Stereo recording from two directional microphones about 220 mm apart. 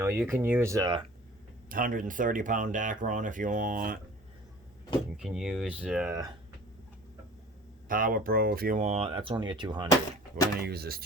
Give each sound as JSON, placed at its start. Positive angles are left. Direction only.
{"t": 0.0, "sound": "speech", "side_deg": -10}
{"t": 1.7, "sound": "speech", "side_deg": -40}
{"t": 5.1, "sound": "speech", "side_deg": -5}
{"t": 7.9, "sound": "speech", "side_deg": -40}
{"t": 9.9, "sound": "a sound", "side_deg": 15}
{"t": 10.6, "sound": "speech", "side_deg": -45}